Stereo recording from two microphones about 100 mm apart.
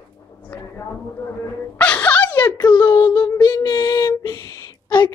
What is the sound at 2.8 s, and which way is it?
Child singing, 35° left (ahead or behind).